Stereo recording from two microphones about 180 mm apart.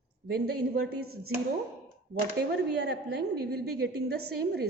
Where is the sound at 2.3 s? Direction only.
65° right (ahead or behind).